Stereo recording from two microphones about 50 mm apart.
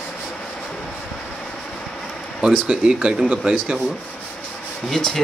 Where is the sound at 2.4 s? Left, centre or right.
Centre.